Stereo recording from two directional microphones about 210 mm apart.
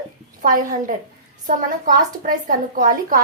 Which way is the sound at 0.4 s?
40° right (ahead or behind).